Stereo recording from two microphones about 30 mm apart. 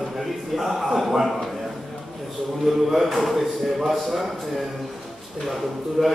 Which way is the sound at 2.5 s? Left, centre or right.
Centre.